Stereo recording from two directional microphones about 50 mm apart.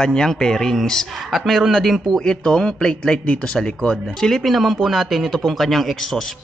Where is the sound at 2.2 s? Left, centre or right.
Centre.